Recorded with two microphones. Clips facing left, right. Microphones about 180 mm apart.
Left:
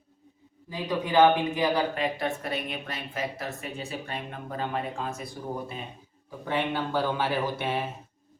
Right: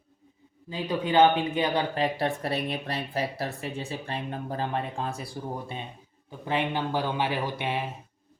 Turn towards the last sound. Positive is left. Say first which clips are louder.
# left 1 dB
turn(degrees=-15)  # may be behind; listen again after turning